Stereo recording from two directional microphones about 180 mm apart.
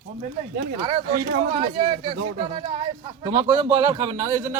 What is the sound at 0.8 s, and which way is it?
Speech, 25° right (ahead or behind).